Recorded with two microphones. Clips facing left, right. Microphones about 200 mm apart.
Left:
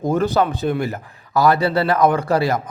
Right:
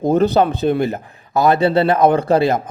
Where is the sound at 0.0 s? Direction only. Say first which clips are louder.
Right 4 dB; 20° right (ahead or behind).